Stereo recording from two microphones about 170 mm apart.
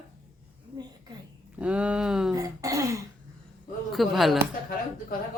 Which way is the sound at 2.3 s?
20° right (ahead or behind).